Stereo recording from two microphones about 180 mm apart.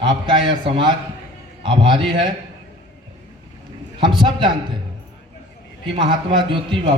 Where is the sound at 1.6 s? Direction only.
30° right (ahead or behind).